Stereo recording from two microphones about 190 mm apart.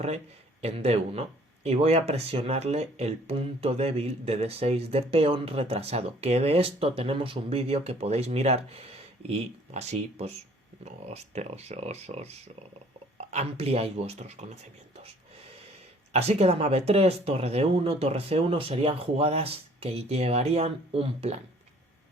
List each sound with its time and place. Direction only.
0.6 s speech: 35° right (ahead or behind)
16.1 s speech: 30° right (ahead or behind)